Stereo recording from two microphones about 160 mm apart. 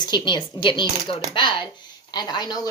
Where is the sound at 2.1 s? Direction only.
25° left (ahead or behind).